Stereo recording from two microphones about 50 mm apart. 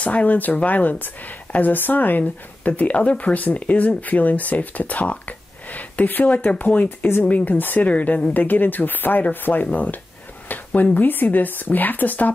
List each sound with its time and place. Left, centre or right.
0.0 s speech: left
7.9 s speech: left